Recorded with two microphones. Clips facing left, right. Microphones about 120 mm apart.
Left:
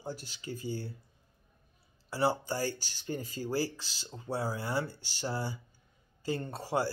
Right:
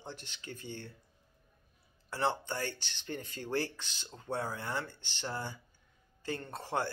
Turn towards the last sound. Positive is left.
turn(degrees=10)  # may be behind; listen again after turning